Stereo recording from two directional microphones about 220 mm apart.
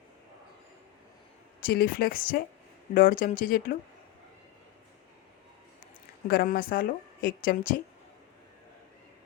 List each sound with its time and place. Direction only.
1.6 s a woman's voice: 45° left (ahead or behind)
6.2 s a woman's voice: 40° left (ahead or behind)